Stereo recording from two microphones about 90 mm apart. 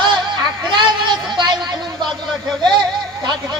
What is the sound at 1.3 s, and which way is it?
Speech, 55° right (ahead or behind).